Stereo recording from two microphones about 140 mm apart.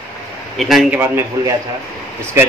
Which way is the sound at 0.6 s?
Centre (ahead or behind).